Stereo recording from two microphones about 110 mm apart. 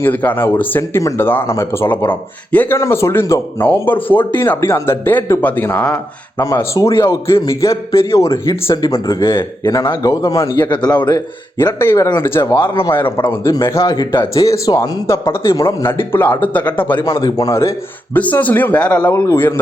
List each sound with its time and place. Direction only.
0.0 s speech: 15° left (ahead or behind)
3.8 s speech: 15° left (ahead or behind)
6.4 s speech: 30° left (ahead or behind)
10.7 s speech: 40° left (ahead or behind)
11.5 s speech: 20° left (ahead or behind)
13.8 s speech: 40° left (ahead or behind); by 17.0 s 15° left (ahead or behind)
17.0 s speech: 40° left (ahead or behind); by 18.2 s 25° left (ahead or behind)
18.2 s speech: 15° left (ahead or behind)